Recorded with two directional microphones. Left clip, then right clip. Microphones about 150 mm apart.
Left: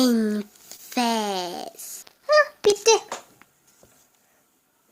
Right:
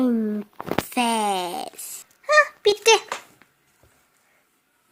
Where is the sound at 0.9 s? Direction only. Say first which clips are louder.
Right 1 dB; 15° right (ahead or behind).